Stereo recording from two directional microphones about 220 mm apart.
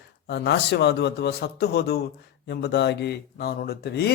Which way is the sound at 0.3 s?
50° left (ahead or behind).